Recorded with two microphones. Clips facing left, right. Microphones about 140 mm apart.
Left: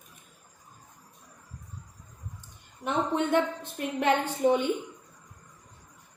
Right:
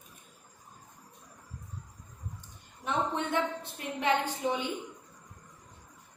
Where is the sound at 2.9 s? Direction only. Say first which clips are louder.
Left 5 dB; 55° left (ahead or behind).